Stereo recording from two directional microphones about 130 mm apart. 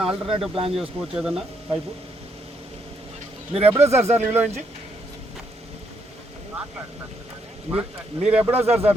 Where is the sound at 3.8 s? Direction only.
55° right (ahead or behind).